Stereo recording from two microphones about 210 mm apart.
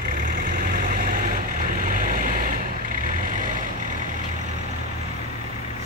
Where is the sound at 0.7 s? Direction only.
40° right (ahead or behind).